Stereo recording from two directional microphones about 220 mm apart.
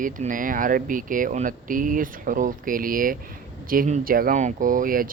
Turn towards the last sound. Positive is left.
turn(degrees=-40)  # may be behind; listen again after turning